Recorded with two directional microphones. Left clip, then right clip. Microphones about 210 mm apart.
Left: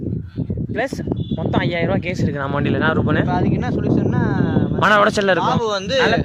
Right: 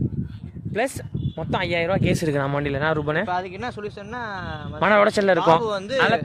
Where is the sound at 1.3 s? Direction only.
5° right (ahead or behind).